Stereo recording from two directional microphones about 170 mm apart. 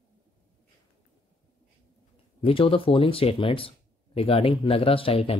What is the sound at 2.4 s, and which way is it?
Speech, 35° left (ahead or behind).